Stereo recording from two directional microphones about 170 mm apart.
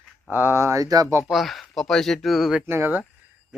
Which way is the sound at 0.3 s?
10° right (ahead or behind).